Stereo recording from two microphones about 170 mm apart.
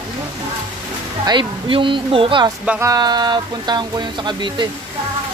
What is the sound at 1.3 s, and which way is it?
Speech, 30° right (ahead or behind).